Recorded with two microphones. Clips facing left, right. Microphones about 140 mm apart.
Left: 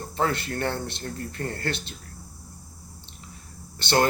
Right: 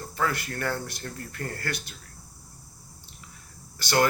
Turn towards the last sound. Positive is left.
turn(degrees=25)  # may be behind; listen again after turning